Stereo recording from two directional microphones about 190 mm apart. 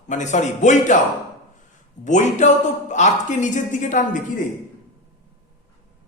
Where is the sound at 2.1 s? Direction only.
40° left (ahead or behind).